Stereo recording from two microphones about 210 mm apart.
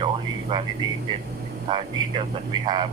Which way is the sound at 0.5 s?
20° right (ahead or behind).